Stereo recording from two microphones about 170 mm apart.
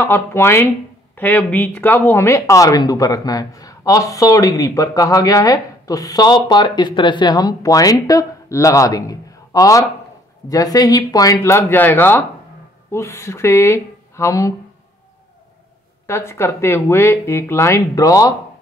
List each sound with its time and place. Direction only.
0.0 s speech: 15° left (ahead or behind)
16.1 s speech: 15° left (ahead or behind)